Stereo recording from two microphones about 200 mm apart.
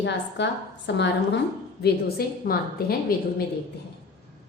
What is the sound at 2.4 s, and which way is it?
Speech, 50° left (ahead or behind).